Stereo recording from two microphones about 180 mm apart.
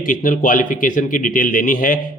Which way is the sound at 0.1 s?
50° left (ahead or behind).